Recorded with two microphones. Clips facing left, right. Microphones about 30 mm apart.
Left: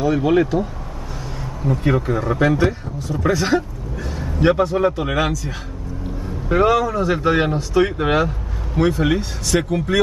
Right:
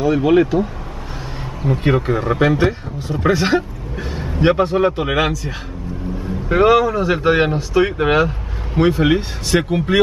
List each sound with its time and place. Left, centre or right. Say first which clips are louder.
0.0 s speech: right 3 dB; centre
1.6 s a man's voice: right 2 dB; right
6.5 s speech: right 3 dB; right